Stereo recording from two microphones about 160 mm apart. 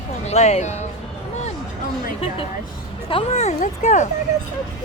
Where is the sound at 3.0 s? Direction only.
40° left (ahead or behind).